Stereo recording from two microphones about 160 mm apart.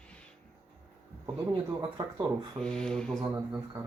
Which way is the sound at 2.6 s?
5° left (ahead or behind).